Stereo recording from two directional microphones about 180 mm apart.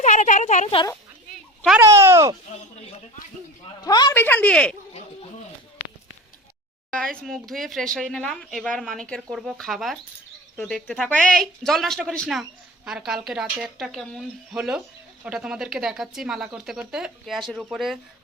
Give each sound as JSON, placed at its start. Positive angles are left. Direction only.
{"t": 0.0, "sound": "a sound", "side_deg": 45}
{"t": 1.8, "sound": "speech", "side_deg": -15}
{"t": 3.8, "sound": "a woman's voice", "side_deg": 20}
{"t": 4.2, "sound": "speech", "side_deg": 10}
{"t": 6.9, "sound": "speech", "side_deg": 5}